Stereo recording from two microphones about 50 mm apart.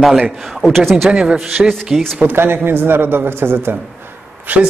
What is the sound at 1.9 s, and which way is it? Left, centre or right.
Speech, centre.